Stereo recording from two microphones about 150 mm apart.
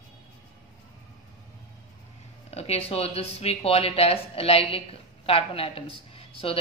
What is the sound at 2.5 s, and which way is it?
Speech, 45° left (ahead or behind).